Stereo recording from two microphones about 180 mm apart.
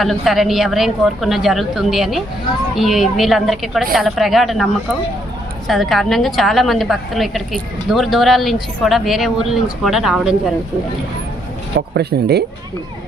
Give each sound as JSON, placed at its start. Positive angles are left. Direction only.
{"t": 0.0, "sound": "a woman's voice", "side_deg": 0}
{"t": 11.9, "sound": "speech", "side_deg": -65}